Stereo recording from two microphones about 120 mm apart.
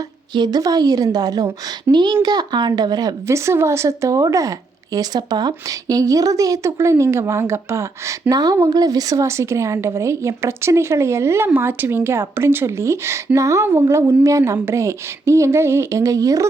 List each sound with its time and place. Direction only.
0.3 s speech: 35° right (ahead or behind)
3.2 s a woman's voice: 25° right (ahead or behind)